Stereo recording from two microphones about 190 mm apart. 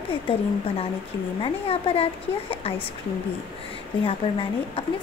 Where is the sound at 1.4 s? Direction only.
30° left (ahead or behind).